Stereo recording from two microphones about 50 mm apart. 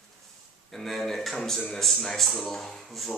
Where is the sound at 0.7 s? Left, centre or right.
Centre.